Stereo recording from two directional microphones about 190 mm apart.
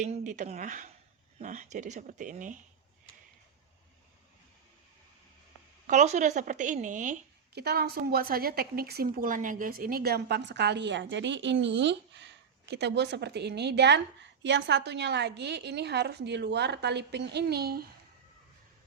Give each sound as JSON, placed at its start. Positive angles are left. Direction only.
{"t": 0.0, "sound": "speech", "side_deg": -40}
{"t": 5.9, "sound": "speech", "side_deg": -40}
{"t": 7.5, "sound": "a woman's voice", "side_deg": -55}